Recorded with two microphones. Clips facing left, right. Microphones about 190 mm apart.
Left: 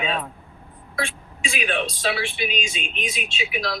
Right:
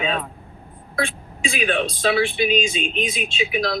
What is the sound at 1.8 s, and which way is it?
Speech, 50° right (ahead or behind).